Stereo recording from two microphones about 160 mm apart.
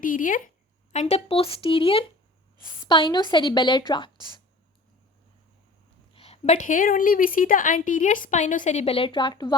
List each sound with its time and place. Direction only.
0.0 s speech: 60° left (ahead or behind)
0.9 s a woman's voice: 45° left (ahead or behind); by 4.1 s 30° left (ahead or behind)
6.1 s a woman's voice: 40° left (ahead or behind)